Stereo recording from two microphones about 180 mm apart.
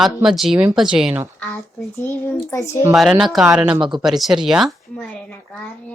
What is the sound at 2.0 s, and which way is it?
Speech, 15° left (ahead or behind).